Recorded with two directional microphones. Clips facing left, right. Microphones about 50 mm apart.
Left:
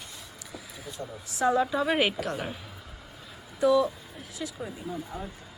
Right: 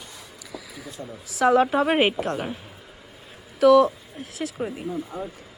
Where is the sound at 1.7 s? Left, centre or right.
Right.